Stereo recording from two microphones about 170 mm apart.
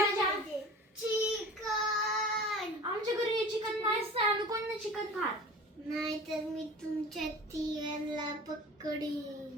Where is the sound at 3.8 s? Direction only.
30° right (ahead or behind).